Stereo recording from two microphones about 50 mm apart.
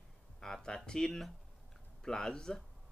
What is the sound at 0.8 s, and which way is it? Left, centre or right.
Speech, centre.